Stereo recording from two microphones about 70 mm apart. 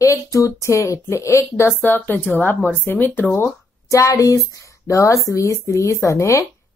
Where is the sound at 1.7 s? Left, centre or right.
Left.